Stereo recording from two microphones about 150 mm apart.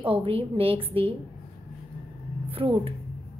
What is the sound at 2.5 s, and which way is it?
Speech, 40° right (ahead or behind).